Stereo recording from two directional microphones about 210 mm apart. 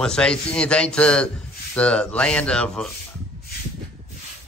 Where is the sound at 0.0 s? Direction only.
5° left (ahead or behind).